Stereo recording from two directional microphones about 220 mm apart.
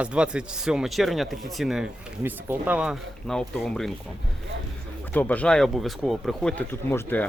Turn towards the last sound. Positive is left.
turn(degrees=10)  # may be behind; listen again after turning